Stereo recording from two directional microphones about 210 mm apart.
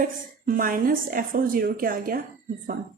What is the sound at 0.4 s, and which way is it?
A woman's voice, 40° right (ahead or behind).